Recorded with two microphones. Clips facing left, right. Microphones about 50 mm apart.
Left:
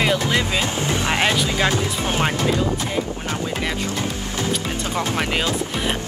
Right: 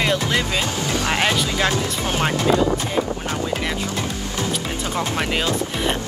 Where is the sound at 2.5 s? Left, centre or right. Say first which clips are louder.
Right 4 dB; right.